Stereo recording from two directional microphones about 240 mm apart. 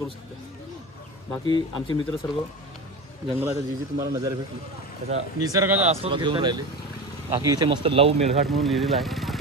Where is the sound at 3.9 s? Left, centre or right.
Centre.